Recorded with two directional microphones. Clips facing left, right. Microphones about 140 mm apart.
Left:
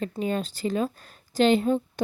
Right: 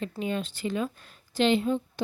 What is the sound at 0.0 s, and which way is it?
A woman's voice, 40° left (ahead or behind).